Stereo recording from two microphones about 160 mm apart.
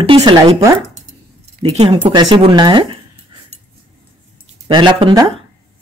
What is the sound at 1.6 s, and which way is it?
Speech, 40° right (ahead or behind).